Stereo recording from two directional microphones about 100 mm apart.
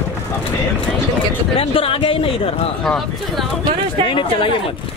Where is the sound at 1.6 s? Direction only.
70° left (ahead or behind).